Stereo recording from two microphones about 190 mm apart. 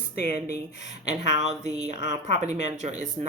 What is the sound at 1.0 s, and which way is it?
Speech, 35° right (ahead or behind).